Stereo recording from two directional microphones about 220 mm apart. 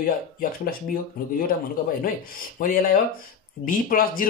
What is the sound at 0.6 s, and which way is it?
Speech, 40° left (ahead or behind).